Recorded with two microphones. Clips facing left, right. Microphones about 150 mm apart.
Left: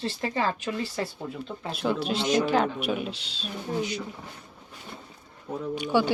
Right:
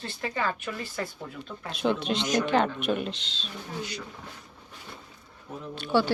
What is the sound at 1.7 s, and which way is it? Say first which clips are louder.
Speech: right 1 dB; 5° left (ahead or behind).